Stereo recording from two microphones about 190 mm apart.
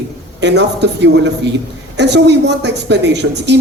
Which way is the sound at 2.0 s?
65° right (ahead or behind).